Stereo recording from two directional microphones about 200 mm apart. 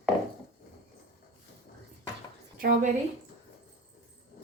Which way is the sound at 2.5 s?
45° right (ahead or behind).